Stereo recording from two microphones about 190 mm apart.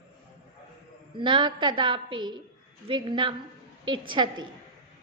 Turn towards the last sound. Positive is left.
turn(degrees=-25)  # may be behind; listen again after turning